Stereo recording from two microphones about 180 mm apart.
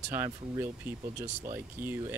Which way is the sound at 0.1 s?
10° right (ahead or behind).